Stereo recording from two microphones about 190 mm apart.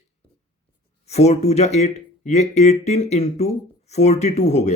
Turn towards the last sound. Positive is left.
turn(degrees=35)  # may be behind; listen again after turning